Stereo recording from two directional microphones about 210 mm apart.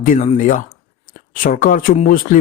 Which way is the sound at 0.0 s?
40° left (ahead or behind).